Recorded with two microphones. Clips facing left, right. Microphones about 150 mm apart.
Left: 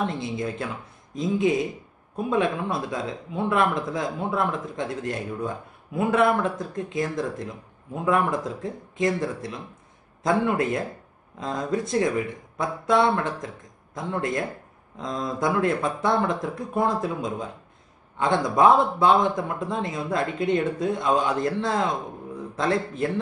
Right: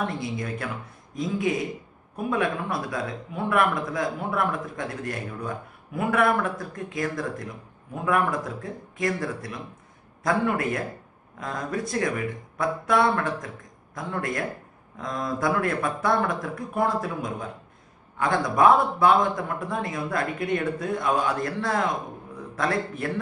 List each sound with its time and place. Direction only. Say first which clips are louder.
0.0 s speech: left 2 dB; 25° left (ahead or behind)